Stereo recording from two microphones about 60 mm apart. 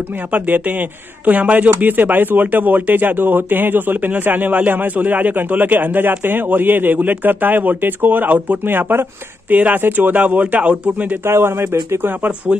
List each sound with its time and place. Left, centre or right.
0.3 s speech: right
11.2 s speech: right